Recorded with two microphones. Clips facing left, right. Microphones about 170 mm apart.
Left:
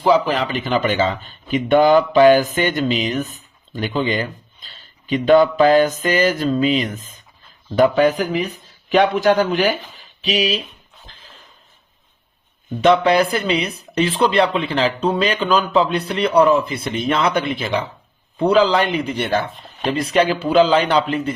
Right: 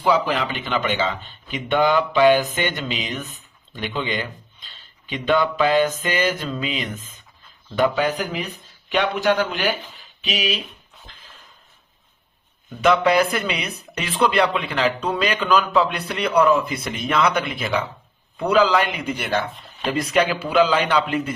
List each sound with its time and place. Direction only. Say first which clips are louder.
0.0 s a man's voice: left 4 dB; 35° left (ahead or behind)
12.8 s a man's voice: left 3 dB; 30° left (ahead or behind)